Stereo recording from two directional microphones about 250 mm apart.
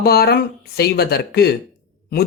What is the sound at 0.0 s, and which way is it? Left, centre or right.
Speech, left.